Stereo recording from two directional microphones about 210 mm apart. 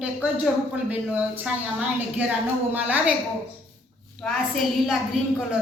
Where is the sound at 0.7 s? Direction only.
5° right (ahead or behind).